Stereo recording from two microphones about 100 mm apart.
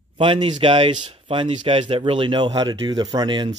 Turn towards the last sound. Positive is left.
turn(degrees=-50)  # may be behind; listen again after turning